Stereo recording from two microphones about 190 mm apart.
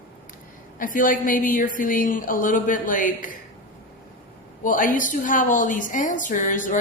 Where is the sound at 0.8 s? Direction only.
45° left (ahead or behind).